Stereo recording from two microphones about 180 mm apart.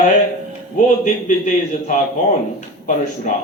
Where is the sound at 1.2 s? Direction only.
45° left (ahead or behind).